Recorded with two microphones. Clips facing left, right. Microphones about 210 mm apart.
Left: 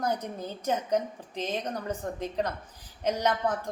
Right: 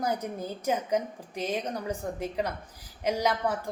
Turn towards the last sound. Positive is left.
turn(degrees=-10)  # may be behind; listen again after turning